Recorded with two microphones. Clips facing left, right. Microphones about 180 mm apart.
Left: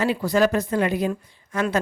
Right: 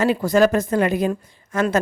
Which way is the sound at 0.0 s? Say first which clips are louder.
Right 4 dB; 45° right (ahead or behind).